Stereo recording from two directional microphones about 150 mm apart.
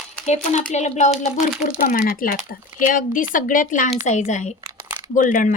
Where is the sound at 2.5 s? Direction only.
65° left (ahead or behind).